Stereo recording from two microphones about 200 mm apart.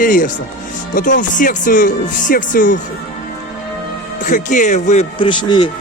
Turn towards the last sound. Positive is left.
turn(degrees=25)  # may be behind; listen again after turning